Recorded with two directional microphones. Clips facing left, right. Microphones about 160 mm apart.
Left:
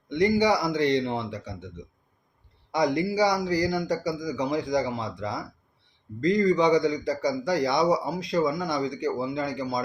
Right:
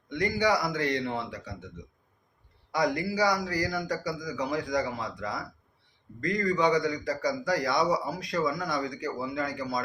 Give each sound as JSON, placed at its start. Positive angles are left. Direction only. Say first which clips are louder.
{"t": 0.1, "sound": "a man's voice", "louder": "left 5 dB", "side_deg": 25}